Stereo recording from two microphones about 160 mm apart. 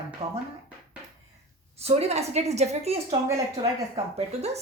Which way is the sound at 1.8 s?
40° right (ahead or behind).